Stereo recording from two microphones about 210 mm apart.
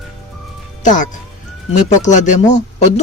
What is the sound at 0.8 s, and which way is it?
Speech, 35° left (ahead or behind).